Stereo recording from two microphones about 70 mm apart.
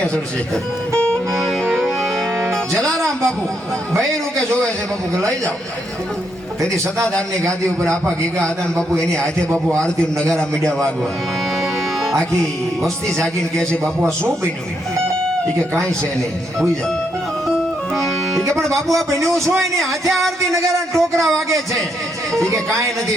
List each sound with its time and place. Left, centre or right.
0.0 s music: centre
7.4 s a man's voice: right
8.4 s a man's voice: centre
12.8 s a man's voice: centre
17.9 s music: centre
19.8 s music: centre
20.5 s a man's voice: right
21.2 s music: centre